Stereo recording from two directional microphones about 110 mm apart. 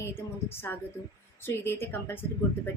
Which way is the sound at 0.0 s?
25° left (ahead or behind).